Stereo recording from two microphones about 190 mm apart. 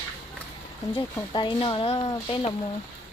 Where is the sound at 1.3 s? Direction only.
25° left (ahead or behind).